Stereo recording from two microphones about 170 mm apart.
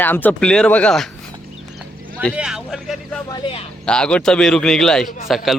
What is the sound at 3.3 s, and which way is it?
Speech, 30° left (ahead or behind).